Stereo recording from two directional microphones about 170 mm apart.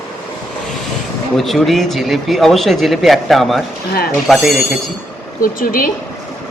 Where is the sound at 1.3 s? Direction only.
Centre (ahead or behind).